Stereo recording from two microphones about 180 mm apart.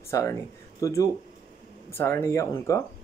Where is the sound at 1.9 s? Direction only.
15° left (ahead or behind).